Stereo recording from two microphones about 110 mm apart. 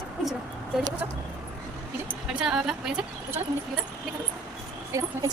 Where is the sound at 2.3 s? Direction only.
5° right (ahead or behind).